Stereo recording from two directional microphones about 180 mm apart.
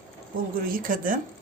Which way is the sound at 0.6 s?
50° right (ahead or behind).